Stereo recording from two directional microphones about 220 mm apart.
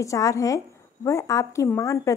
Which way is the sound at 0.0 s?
15° left (ahead or behind).